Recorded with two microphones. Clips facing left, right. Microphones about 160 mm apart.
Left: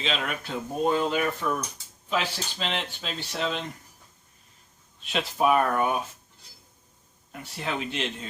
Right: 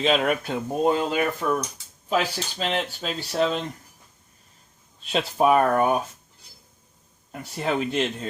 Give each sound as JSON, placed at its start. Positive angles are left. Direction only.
{"t": 0.0, "sound": "speech", "side_deg": -50}
{"t": 5.0, "sound": "speech", "side_deg": -35}
{"t": 7.4, "sound": "speech", "side_deg": -40}